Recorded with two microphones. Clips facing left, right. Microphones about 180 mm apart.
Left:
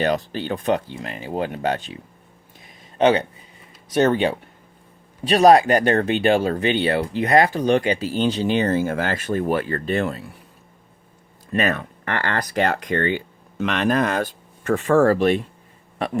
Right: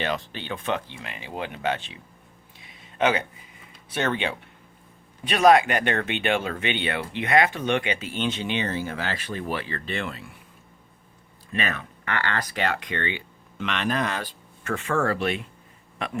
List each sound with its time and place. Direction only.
0.0 s speech: 40° left (ahead or behind)
2.6 s a sound: 40° left (ahead or behind)
3.8 s speech: 40° left (ahead or behind)
11.5 s speech: 45° left (ahead or behind)